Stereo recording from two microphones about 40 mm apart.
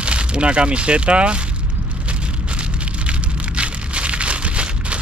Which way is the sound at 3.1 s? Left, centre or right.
Right.